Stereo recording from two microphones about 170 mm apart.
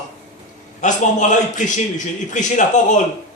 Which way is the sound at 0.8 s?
45° left (ahead or behind).